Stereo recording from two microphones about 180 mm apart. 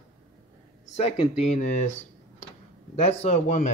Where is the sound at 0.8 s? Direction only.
35° left (ahead or behind).